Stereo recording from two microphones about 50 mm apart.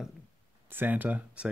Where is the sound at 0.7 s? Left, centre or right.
Right.